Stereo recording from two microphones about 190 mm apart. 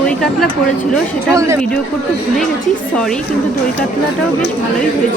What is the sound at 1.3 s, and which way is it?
Speech, 15° right (ahead or behind).